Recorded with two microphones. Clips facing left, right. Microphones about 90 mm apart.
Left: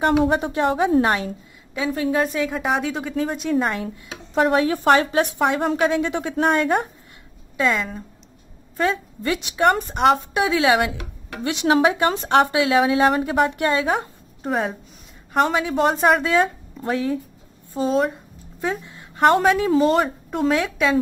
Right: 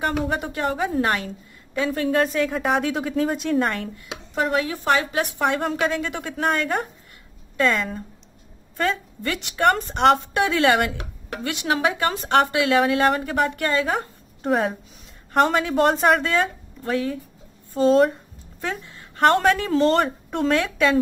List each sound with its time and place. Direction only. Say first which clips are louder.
0.4 s a woman's voice: left 4 dB; 25° left (ahead or behind)
1.8 s a woman's voice: even; centre (ahead or behind)
4.5 s a woman's voice: left 5 dB; 40° left (ahead or behind)
5.5 s a woman's voice: left 3 dB; 10° left (ahead or behind)
7.5 s a woman's voice: even; 5° left (ahead or behind)
11.4 s a woman's voice: left 5 dB; 25° left (ahead or behind)
16.9 s a woman's voice: left 1 dB; 25° left (ahead or behind)
17.7 s a woman's voice: right 4 dB; centre (ahead or behind)
18.6 s a sound: left 4 dB; 15° left (ahead or behind)
19.3 s a woman's voice: left 2 dB; 5° left (ahead or behind)